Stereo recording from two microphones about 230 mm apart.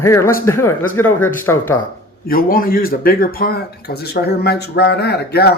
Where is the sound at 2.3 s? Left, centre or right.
Left.